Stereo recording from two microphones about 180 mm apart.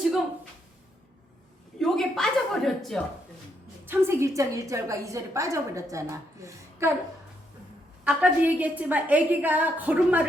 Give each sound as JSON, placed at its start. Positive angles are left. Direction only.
{"t": 1.8, "sound": "speech", "side_deg": 0}
{"t": 3.8, "sound": "a woman's voice", "side_deg": -15}
{"t": 8.0, "sound": "a woman's voice", "side_deg": -10}